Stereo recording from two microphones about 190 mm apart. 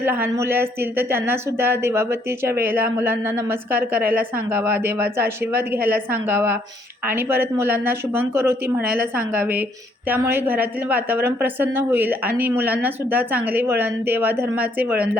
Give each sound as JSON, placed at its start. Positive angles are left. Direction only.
{"t": 0.0, "sound": "a woman's voice", "side_deg": -10}
{"t": 8.4, "sound": "speech", "side_deg": -55}
{"t": 9.1, "sound": "a woman's voice", "side_deg": -10}